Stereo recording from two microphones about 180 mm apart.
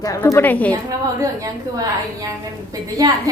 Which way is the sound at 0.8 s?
20° right (ahead or behind).